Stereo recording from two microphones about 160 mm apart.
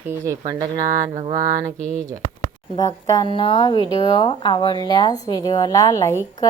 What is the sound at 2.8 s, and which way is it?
Speech, 25° left (ahead or behind).